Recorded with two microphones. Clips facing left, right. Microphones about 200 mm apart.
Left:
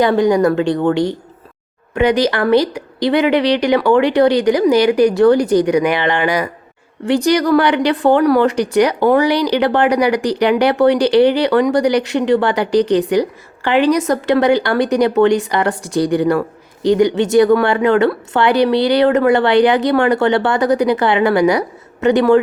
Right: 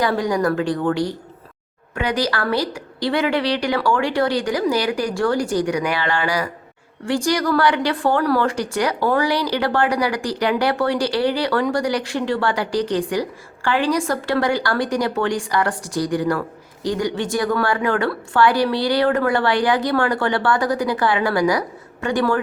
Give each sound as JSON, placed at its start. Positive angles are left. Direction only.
{"t": 0.0, "sound": "speech", "side_deg": 25}